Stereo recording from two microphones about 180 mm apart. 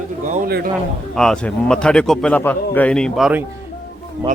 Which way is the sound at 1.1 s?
5° left (ahead or behind).